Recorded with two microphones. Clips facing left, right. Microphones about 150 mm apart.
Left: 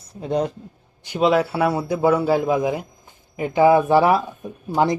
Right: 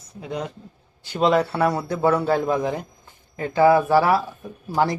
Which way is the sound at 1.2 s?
5° left (ahead or behind).